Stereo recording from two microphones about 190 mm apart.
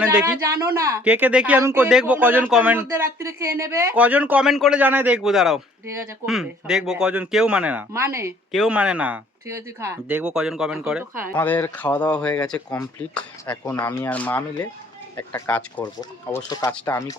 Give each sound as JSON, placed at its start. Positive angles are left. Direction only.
{"t": 0.0, "sound": "speech", "side_deg": -10}
{"t": 11.3, "sound": "speech", "side_deg": 10}